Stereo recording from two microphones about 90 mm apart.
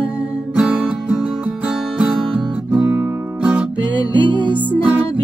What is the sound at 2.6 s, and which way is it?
Music, 20° right (ahead or behind).